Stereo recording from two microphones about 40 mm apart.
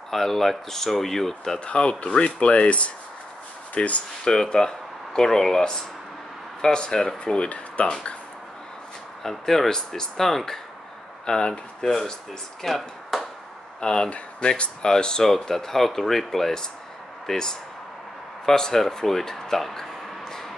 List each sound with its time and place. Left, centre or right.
0.1 s speech: centre
1.6 s speech: left
4.2 s speech: centre
7.3 s speech: left
9.2 s speech: centre
12.6 s a sound: centre
13.7 s speech: left